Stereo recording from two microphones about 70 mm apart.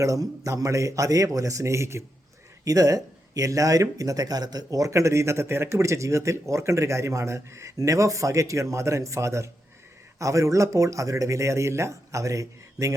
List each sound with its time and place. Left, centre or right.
0.0 s speech: right
2.6 s speech: right